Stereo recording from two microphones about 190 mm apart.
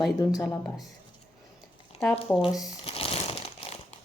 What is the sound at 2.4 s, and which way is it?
Speech, 20° left (ahead or behind).